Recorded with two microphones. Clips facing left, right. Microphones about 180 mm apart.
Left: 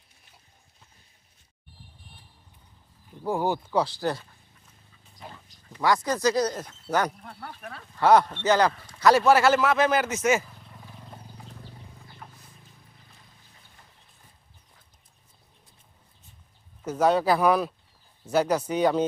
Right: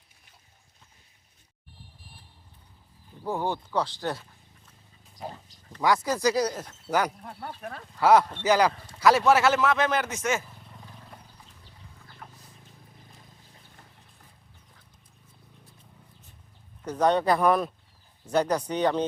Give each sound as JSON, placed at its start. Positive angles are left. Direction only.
{"t": 3.2, "sound": "speech", "side_deg": 10}
{"t": 5.8, "sound": "speech", "side_deg": -10}
{"t": 7.3, "sound": "speech", "side_deg": -20}
{"t": 7.9, "sound": "speech", "side_deg": -5}
{"t": 11.3, "sound": "wild animals", "side_deg": 60}
{"t": 16.8, "sound": "speech", "side_deg": 5}